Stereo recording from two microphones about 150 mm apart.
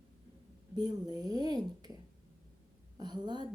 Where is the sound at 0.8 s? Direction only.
25° right (ahead or behind).